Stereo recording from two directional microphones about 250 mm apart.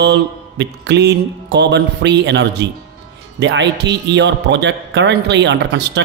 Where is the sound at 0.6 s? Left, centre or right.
Right.